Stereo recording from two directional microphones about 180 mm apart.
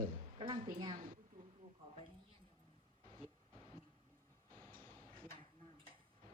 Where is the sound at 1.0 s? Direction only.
50° right (ahead or behind).